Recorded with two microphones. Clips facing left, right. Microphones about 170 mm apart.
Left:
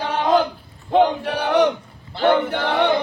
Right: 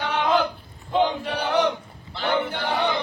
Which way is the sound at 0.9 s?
60° left (ahead or behind).